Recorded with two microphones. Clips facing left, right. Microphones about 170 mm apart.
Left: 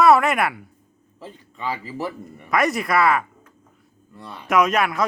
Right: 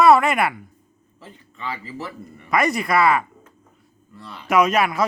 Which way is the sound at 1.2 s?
15° left (ahead or behind).